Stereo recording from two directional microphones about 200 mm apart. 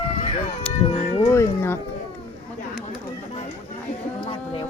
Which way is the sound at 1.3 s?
15° left (ahead or behind).